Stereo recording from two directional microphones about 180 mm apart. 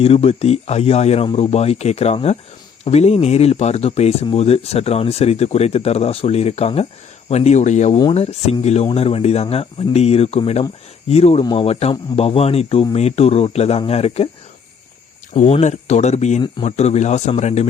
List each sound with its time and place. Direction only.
0.0 s speech: 35° left (ahead or behind)
15.3 s speech: 40° left (ahead or behind)